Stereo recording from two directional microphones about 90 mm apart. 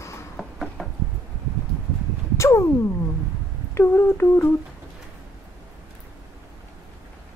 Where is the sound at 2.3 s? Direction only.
30° left (ahead or behind).